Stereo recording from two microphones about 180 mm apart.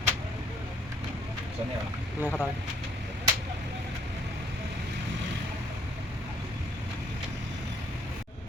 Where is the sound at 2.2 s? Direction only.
5° left (ahead or behind).